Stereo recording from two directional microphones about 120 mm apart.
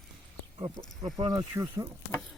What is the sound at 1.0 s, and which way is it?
Speech, 35° right (ahead or behind).